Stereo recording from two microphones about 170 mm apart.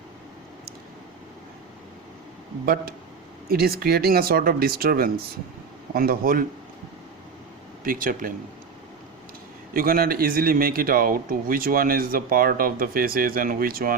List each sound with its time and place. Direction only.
3.5 s speech: 65° right (ahead or behind)
7.9 s speech: 55° right (ahead or behind)
9.7 s speech: 60° right (ahead or behind)